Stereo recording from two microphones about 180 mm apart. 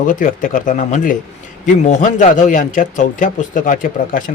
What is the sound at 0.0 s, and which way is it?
Speech, 45° left (ahead or behind).